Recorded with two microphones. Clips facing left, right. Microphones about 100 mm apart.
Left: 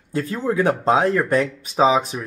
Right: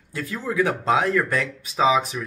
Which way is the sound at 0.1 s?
35° left (ahead or behind).